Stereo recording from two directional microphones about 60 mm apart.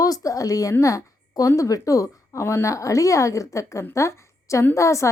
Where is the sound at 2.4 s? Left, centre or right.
Left.